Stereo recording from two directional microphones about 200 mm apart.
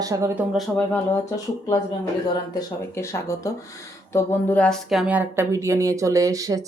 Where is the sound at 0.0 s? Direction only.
15° right (ahead or behind).